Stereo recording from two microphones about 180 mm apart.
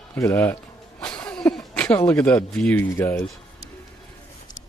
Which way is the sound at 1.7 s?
5° left (ahead or behind).